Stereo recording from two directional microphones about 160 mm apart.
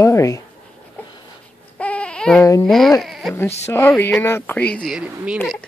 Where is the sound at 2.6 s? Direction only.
Centre (ahead or behind).